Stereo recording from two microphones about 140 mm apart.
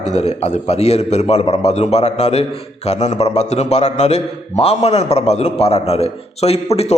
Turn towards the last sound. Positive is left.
turn(degrees=45)  # may be behind; listen again after turning